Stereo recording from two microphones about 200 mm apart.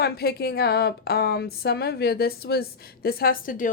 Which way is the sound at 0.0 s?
50° left (ahead or behind).